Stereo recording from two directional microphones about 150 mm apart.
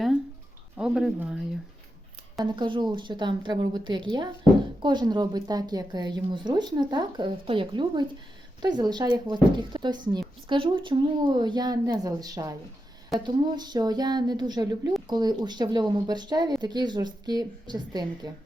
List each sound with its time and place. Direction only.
0.8 s speech: 5° right (ahead or behind)
2.4 s a woman's voice: 30° right (ahead or behind)